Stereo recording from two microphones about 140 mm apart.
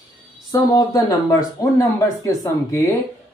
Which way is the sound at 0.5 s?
25° left (ahead or behind).